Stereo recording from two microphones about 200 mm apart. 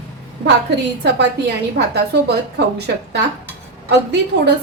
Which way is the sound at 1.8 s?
55° right (ahead or behind).